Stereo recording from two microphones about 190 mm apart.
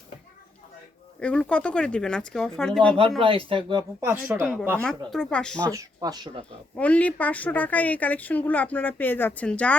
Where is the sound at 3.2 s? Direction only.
30° right (ahead or behind).